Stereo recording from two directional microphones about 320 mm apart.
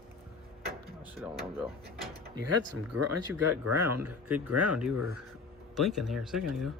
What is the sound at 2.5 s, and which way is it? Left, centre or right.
Speech, right.